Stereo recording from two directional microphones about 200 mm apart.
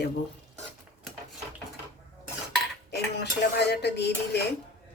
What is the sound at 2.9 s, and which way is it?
A woman's voice, 55° left (ahead or behind).